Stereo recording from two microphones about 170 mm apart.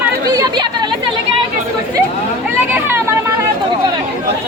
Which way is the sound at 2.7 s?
15° right (ahead or behind).